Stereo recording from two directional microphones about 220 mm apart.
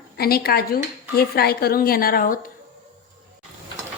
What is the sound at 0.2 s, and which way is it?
Speech, 45° left (ahead or behind).